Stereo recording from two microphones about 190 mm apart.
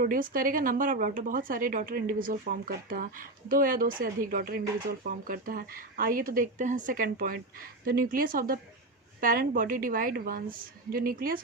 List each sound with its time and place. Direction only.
0.0 s speech: 45° right (ahead or behind)